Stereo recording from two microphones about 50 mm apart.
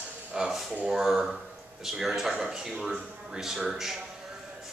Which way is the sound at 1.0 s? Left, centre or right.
Centre.